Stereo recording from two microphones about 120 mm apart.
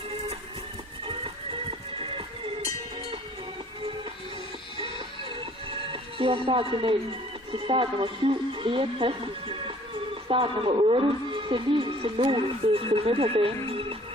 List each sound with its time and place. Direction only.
2.0 s music: 50° right (ahead or behind)
5.7 s speech: 45° right (ahead or behind)